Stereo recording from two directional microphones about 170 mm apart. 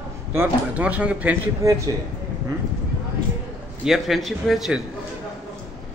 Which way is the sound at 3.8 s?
Centre (ahead or behind).